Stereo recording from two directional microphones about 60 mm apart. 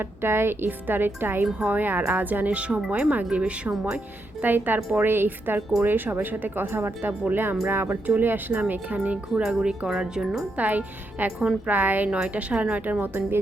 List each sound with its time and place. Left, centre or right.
0.0 s a woman's voice: right
1.5 s a woman's voice: right
4.5 s a woman's voice: right
8.0 s a woman's voice: right
9.3 s wind chime: centre
10.6 s a woman's voice: right